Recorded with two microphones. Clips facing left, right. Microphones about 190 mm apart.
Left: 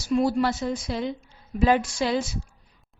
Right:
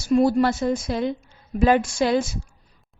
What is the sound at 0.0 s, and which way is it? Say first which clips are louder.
A woman's voice: right 4 dB; 50° right (ahead or behind).